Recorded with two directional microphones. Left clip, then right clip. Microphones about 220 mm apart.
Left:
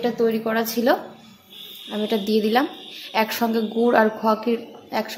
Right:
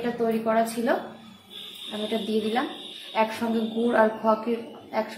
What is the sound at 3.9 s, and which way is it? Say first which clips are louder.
Speech: left 2 dB; 45° left (ahead or behind).